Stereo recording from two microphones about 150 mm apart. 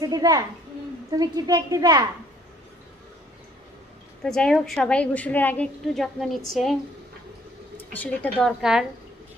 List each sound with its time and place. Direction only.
0.0 s a child's voice: 25° right (ahead or behind)
4.2 s a woman's voice: 5° left (ahead or behind)
7.7 s a woman's voice: 10° left (ahead or behind)
8.5 s a woman's voice: 5° right (ahead or behind)